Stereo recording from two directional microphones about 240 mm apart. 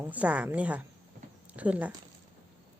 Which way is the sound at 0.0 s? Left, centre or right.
Centre.